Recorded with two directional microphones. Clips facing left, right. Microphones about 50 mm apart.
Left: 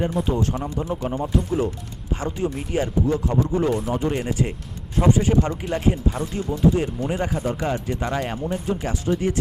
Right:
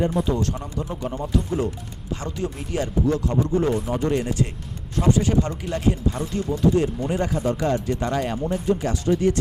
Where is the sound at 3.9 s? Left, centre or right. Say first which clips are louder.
Right 1 dB; centre.